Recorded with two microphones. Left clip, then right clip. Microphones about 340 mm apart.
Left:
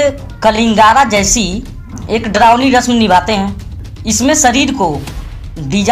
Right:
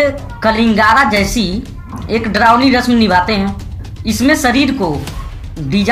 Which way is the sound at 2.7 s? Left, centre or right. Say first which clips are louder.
Left 2 dB; centre.